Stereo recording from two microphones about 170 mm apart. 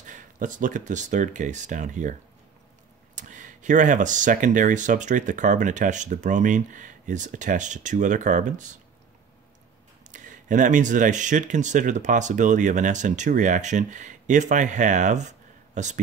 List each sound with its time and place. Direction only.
0.0 s speech: 50° right (ahead or behind)
3.2 s speech: 45° right (ahead or behind)
10.1 s speech: 50° right (ahead or behind)